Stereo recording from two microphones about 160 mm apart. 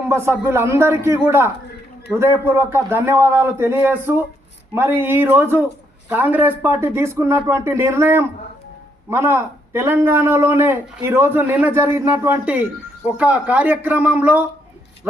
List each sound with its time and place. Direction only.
0.1 s a man's voice: 15° right (ahead or behind)